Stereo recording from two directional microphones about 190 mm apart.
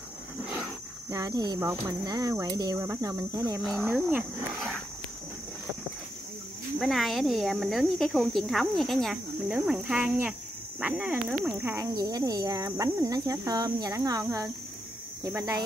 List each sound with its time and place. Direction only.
1.1 s speech: 20° right (ahead or behind)
6.8 s speech: centre (ahead or behind)